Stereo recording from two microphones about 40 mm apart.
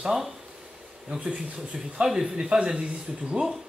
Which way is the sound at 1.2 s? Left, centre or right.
Right.